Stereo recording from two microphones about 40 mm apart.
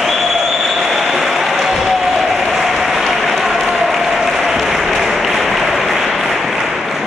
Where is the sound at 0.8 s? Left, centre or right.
Centre.